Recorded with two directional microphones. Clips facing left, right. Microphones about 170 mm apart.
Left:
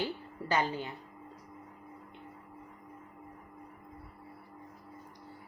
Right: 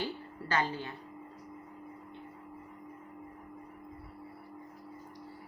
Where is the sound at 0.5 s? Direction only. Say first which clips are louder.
Left 1 dB; 15° left (ahead or behind).